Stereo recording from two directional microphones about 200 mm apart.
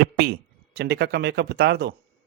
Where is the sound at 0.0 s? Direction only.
50° right (ahead or behind).